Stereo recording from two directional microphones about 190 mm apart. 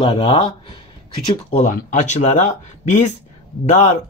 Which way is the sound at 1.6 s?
40° left (ahead or behind).